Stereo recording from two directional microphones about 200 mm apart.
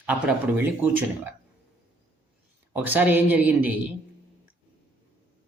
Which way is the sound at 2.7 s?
10° right (ahead or behind).